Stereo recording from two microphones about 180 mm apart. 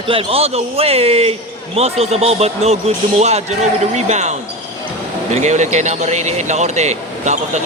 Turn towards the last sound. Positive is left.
turn(degrees=-40)  # may be behind; listen again after turning